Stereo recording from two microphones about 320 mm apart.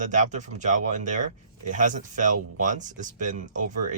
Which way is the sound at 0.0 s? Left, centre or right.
Right.